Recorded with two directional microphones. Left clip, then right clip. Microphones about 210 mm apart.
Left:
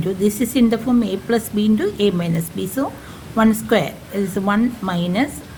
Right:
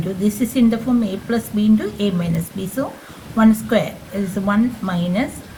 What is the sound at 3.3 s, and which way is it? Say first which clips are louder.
Speech: even; 50° left (ahead or behind).